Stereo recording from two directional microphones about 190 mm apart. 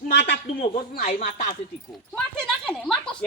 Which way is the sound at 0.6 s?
40° left (ahead or behind).